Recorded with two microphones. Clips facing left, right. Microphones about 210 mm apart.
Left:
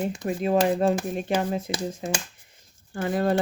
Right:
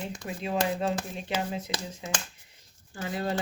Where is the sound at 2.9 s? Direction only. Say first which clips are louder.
Left 8 dB; 55° left (ahead or behind).